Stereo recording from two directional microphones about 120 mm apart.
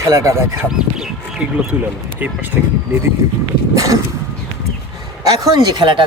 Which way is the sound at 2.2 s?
15° right (ahead or behind).